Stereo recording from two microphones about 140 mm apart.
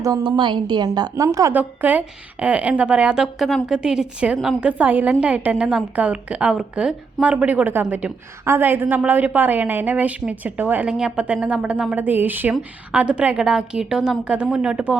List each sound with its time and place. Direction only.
0.2 s a woman's voice: 35° right (ahead or behind)
1.5 s a woman's voice: 10° right (ahead or behind)